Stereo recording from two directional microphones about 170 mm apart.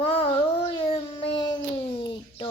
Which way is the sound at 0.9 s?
30° left (ahead or behind).